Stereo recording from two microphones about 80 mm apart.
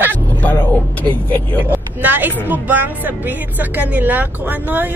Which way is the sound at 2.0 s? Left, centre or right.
Right.